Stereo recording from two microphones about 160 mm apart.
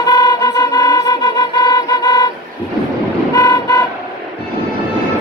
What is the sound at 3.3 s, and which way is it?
Vehicle, 25° left (ahead or behind).